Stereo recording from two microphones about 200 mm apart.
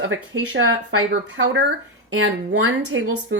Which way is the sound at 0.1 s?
70° right (ahead or behind).